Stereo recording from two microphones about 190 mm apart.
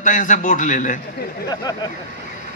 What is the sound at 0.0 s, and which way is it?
A man's voice, 40° left (ahead or behind).